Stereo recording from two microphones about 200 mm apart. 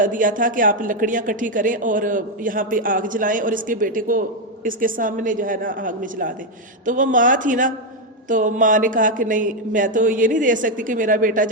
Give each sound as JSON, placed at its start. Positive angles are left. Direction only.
{"t": 0.0, "sound": "a woman's voice", "side_deg": -40}